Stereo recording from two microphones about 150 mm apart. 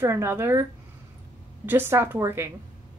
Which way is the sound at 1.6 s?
15° right (ahead or behind).